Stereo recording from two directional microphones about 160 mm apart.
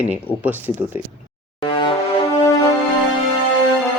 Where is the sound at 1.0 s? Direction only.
45° left (ahead or behind).